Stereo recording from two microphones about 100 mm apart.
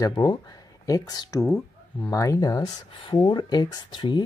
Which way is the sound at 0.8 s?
40° left (ahead or behind).